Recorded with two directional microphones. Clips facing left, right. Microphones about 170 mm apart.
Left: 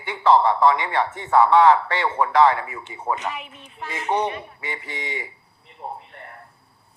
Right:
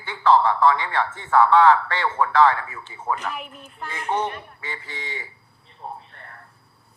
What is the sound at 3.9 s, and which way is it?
A man's voice, 20° left (ahead or behind).